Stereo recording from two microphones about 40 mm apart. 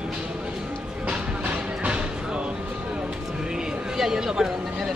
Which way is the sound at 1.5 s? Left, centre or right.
Right.